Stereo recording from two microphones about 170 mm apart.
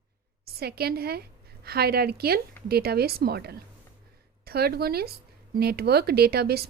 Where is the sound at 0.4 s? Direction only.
65° right (ahead or behind).